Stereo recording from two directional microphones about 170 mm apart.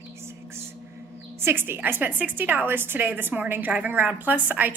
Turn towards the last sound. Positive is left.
turn(degrees=-10)  # may be behind; listen again after turning